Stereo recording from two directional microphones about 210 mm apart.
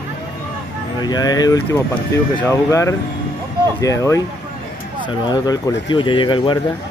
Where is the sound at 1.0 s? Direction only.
20° left (ahead or behind).